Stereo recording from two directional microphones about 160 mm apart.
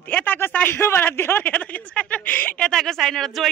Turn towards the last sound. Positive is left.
turn(degrees=0)  # may be behind; listen again after turning